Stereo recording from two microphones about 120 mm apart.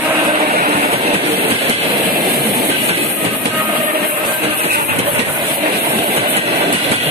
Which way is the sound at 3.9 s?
45° right (ahead or behind).